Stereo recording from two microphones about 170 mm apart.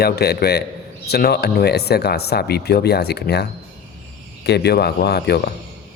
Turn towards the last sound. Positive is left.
turn(degrees=70)  # may be behind; listen again after turning